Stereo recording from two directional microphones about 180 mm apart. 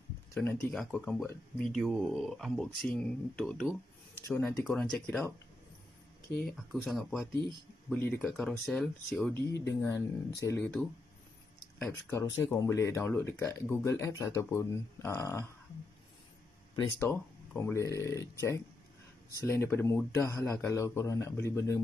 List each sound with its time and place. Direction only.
0.3 s speech: 5° left (ahead or behind)
6.5 s speech: centre (ahead or behind)
9.5 s speech: 15° left (ahead or behind)
10.6 s speech: centre (ahead or behind)
11.9 s speech: 15° left (ahead or behind)
17.0 s speech: 10° left (ahead or behind)